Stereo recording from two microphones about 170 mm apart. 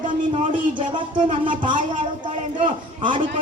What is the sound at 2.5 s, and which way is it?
Speech, 30° right (ahead or behind).